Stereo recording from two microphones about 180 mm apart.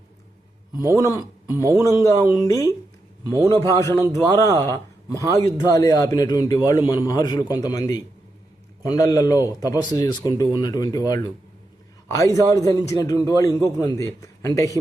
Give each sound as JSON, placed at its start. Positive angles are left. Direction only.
{"t": 1.0, "sound": "a man's voice", "side_deg": 20}
{"t": 3.3, "sound": "a man's voice", "side_deg": -15}
{"t": 3.6, "sound": "a man's voice", "side_deg": 15}